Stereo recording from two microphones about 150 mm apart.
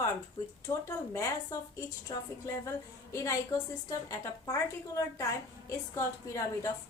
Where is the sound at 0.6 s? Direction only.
20° left (ahead or behind).